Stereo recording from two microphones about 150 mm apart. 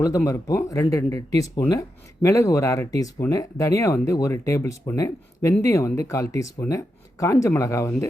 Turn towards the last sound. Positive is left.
turn(degrees=20)  # may be behind; listen again after turning